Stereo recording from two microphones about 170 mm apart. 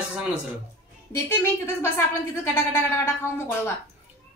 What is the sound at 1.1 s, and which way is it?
A woman's voice, 15° left (ahead or behind).